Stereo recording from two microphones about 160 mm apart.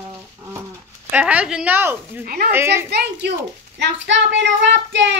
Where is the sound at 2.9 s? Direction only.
90° right.